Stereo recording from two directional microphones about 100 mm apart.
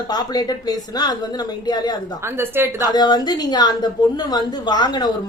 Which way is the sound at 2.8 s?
45° left (ahead or behind).